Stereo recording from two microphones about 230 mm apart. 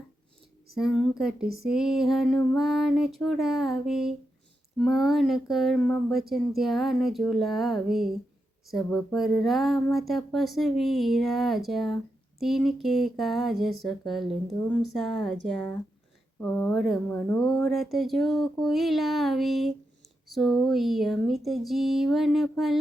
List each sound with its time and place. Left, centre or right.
1.2 s speech: centre
1.5 s a sound: right
1.7 s speech: centre